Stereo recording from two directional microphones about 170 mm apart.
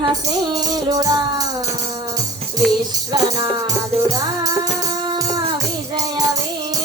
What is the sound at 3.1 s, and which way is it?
Music, 20° right (ahead or behind).